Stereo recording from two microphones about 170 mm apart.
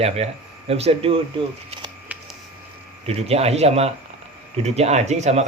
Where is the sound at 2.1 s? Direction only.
10° right (ahead or behind).